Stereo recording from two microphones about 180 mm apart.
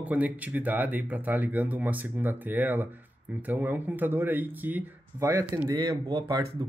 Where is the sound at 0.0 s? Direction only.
10° right (ahead or behind).